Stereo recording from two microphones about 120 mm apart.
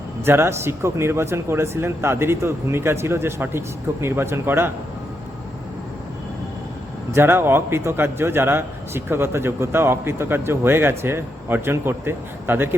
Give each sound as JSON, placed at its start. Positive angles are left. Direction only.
{"t": 0.3, "sound": "a man's voice", "side_deg": -20}
{"t": 7.1, "sound": "a man's voice", "side_deg": -20}